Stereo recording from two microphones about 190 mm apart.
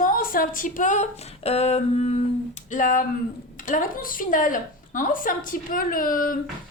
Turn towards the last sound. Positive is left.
turn(degrees=45)  # may be behind; listen again after turning